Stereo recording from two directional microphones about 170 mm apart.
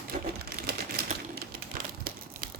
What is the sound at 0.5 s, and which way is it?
Typewriter, 60° right (ahead or behind).